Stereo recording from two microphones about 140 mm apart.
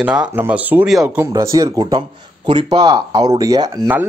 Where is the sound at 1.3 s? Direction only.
25° right (ahead or behind).